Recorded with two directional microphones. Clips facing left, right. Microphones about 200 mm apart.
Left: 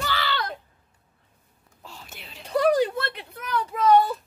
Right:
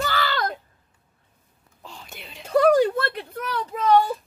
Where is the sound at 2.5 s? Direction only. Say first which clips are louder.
Right 4 dB; 50° right (ahead or behind).